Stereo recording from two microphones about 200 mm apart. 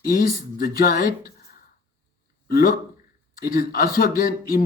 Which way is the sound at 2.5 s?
45° left (ahead or behind).